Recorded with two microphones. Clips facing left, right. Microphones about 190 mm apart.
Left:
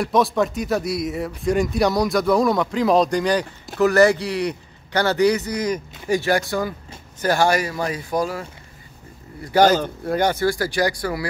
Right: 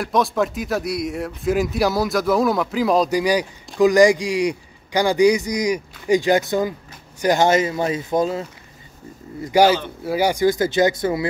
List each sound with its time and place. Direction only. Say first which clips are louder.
0.0 s a man's voice: left 1 dB; centre (ahead or behind); by 8.5 s 25° right (ahead or behind)
9.4 s a man's voice: even; 15° right (ahead or behind)